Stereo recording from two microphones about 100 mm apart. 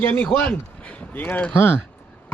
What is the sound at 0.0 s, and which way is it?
Speech, 20° left (ahead or behind).